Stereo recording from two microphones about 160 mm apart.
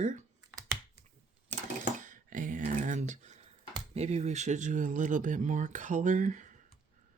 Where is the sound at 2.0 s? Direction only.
55° right (ahead or behind).